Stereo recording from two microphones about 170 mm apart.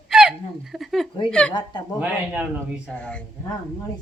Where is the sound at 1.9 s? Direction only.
10° right (ahead or behind).